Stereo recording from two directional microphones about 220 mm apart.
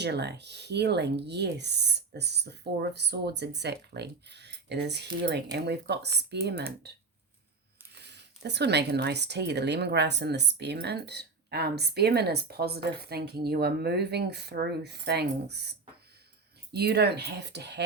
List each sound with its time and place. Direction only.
0.0 s speech: 50° right (ahead or behind)
8.0 s speech: 50° right (ahead or behind)
16.7 s speech: 45° right (ahead or behind)